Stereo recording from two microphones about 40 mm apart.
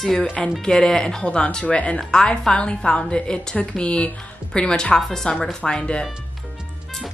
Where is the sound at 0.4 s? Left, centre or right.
Centre.